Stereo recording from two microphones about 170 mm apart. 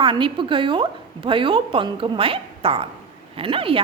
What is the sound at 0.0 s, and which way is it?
A woman's voice, 30° right (ahead or behind).